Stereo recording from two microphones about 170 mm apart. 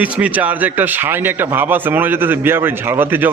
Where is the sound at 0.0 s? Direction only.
10° right (ahead or behind).